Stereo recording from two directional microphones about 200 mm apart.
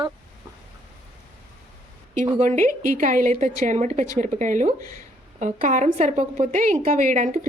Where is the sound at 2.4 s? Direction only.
40° right (ahead or behind).